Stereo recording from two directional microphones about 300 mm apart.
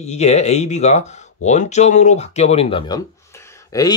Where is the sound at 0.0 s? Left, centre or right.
Left.